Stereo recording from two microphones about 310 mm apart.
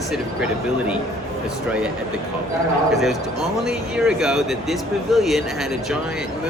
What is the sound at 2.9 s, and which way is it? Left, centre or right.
Speech, centre.